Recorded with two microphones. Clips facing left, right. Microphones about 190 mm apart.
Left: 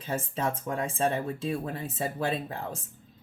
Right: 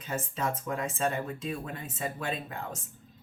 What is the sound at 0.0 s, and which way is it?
Speech, 30° left (ahead or behind).